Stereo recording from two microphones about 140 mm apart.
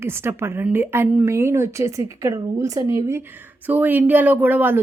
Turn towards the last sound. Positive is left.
turn(degrees=-15)  # may be behind; listen again after turning